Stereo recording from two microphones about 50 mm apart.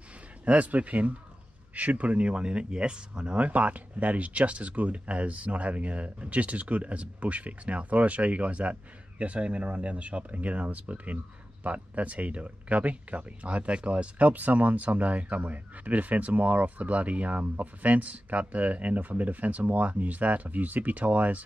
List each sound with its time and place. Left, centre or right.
0.5 s speech: right